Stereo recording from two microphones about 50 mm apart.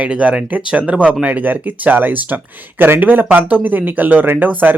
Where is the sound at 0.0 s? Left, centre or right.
Right.